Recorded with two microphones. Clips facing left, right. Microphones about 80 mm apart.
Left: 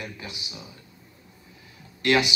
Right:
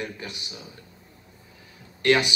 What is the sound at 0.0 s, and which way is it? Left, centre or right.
Speech, right.